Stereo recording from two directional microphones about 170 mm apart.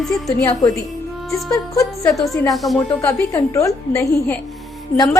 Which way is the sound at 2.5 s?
Centre (ahead or behind).